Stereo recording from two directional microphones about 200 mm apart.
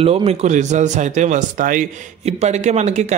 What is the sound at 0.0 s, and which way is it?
A man's voice, 30° right (ahead or behind).